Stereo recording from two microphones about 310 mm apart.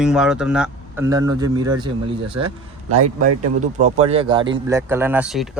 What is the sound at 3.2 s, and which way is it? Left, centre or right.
Speech, right.